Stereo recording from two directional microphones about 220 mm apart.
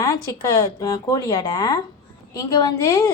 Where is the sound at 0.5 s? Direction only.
15° left (ahead or behind).